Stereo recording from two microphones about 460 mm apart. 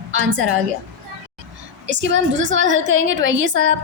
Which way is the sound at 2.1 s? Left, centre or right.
Right.